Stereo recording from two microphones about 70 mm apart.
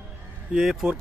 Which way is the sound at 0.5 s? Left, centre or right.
Centre.